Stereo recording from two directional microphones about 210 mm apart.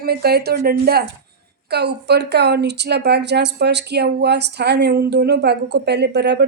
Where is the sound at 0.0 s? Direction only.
50° right (ahead or behind).